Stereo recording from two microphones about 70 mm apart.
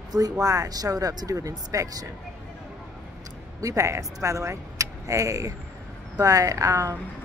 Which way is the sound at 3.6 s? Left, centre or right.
Right.